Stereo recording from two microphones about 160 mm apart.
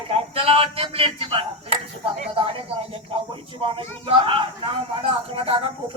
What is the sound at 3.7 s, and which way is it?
Speech, 35° right (ahead or behind).